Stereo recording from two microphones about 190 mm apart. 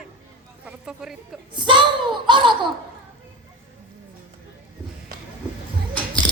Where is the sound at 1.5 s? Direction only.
25° right (ahead or behind).